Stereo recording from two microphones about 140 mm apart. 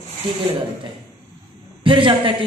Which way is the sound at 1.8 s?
35° right (ahead or behind).